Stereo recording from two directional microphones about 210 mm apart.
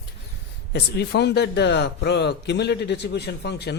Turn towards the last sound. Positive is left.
turn(degrees=50)  # may be behind; listen again after turning